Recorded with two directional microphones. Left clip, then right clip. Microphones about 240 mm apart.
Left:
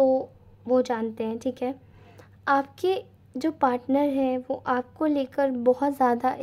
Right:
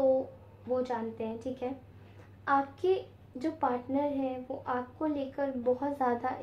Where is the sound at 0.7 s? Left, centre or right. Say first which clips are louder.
Left 8 dB; left.